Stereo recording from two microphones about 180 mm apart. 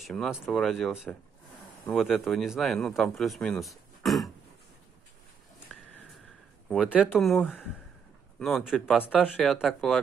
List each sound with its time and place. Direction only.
0.0 s speech: centre (ahead or behind)
5.7 s a sound: 5° left (ahead or behind)
6.7 s speech: centre (ahead or behind)